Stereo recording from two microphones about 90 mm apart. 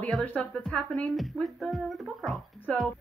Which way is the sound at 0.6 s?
5° left (ahead or behind).